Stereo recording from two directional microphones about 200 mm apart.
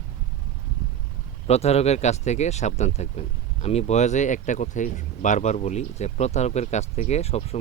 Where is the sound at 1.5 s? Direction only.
30° left (ahead or behind).